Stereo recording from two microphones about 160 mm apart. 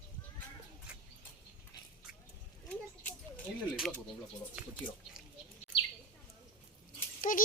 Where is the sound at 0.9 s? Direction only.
5° right (ahead or behind).